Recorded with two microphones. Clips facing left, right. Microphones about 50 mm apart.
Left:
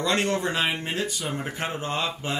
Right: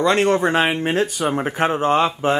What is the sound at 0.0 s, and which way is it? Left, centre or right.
Speech, right.